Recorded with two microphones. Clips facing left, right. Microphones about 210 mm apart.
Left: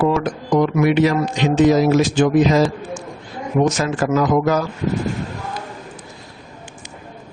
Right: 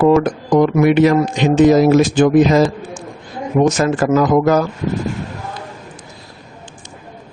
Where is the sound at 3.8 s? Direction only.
50° right (ahead or behind).